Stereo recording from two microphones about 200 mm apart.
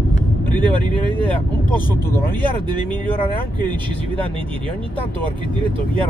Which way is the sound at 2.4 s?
25° right (ahead or behind).